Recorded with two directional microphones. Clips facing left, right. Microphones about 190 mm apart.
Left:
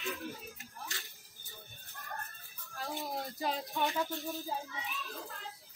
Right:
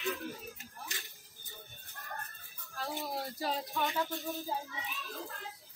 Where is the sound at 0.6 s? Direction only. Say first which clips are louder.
Even; 20° right (ahead or behind).